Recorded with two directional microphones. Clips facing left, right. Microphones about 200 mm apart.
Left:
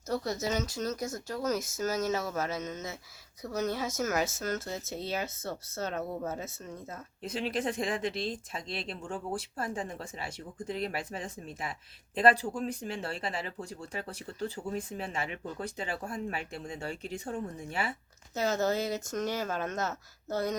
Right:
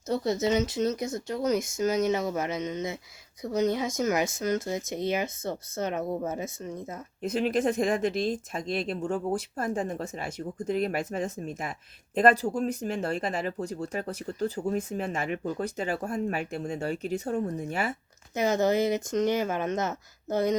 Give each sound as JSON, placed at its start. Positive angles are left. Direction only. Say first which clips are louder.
{"t": 0.1, "sound": "speech", "louder": "right 6 dB", "side_deg": -25}
{"t": 7.2, "sound": "speech", "louder": "right 7 dB", "side_deg": -45}
{"t": 18.3, "sound": "speech", "louder": "right 5 dB", "side_deg": -15}